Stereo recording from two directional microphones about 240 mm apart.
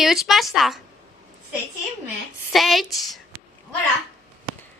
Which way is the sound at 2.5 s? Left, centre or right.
Centre.